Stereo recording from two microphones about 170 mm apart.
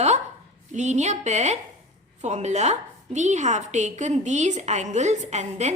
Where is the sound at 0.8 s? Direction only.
45° right (ahead or behind).